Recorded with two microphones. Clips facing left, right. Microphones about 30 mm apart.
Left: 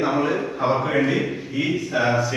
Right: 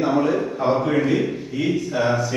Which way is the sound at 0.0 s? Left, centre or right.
Centre.